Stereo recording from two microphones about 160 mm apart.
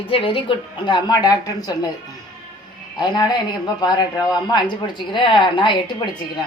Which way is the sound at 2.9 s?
25° left (ahead or behind).